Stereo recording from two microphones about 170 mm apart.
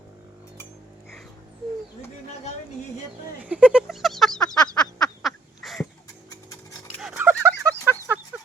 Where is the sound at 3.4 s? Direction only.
5° right (ahead or behind).